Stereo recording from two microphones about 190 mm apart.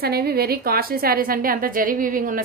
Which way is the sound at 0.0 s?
55° right (ahead or behind).